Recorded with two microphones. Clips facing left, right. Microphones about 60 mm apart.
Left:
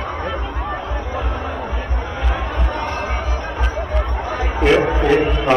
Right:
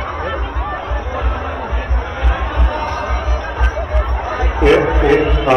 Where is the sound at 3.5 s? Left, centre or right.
Right.